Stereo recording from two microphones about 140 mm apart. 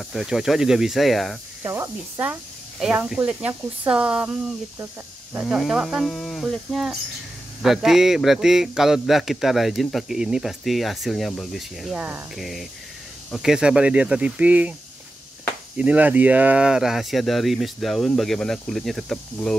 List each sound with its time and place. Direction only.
0.1 s a man's voice: centre (ahead or behind)
1.6 s speech: 20° right (ahead or behind)
2.8 s a man's voice: 5° right (ahead or behind)
15.8 s a man's voice: 10° right (ahead or behind)